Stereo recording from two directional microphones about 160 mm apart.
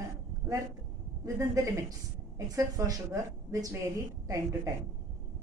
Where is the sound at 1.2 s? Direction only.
20° right (ahead or behind).